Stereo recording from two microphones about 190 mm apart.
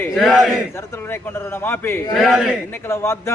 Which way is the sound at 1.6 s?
10° left (ahead or behind).